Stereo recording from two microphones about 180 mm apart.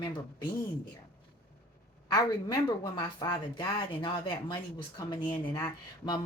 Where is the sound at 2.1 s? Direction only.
20° left (ahead or behind).